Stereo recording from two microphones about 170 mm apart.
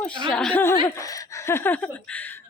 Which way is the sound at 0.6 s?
15° left (ahead or behind).